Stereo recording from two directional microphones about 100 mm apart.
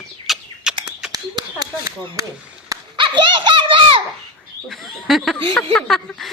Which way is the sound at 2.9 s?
55° right (ahead or behind).